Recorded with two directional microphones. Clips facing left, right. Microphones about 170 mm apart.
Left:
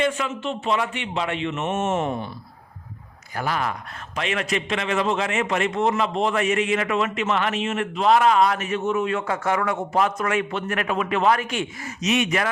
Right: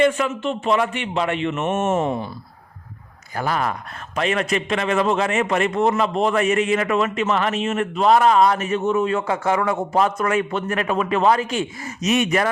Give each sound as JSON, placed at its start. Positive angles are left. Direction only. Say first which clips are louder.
{"t": 0.0, "sound": "a man's voice", "louder": "right 5 dB", "side_deg": -50}
{"t": 3.3, "sound": "a man's voice", "louder": "right 3 dB", "side_deg": -40}
{"t": 12.0, "sound": "a man's voice", "louder": "right 3 dB", "side_deg": -45}